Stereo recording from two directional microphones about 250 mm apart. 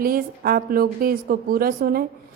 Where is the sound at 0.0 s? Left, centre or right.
Right.